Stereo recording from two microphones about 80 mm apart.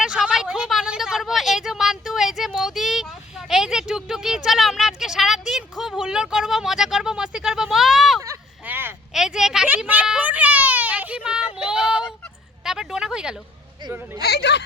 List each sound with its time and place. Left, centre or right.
0.0 s a sound: centre
8.6 s vehicle: right
9.1 s speech: centre
9.6 s children playing: right
12.6 s a sound: centre
13.9 s hubbub: right